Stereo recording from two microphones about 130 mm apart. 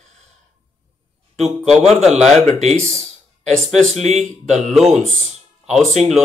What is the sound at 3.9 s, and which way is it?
Speech, 60° right (ahead or behind).